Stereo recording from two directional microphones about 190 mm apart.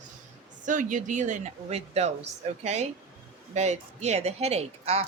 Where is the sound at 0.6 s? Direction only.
40° right (ahead or behind).